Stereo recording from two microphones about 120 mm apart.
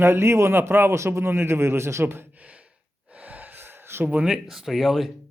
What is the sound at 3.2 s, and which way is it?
Gasp, 15° right (ahead or behind).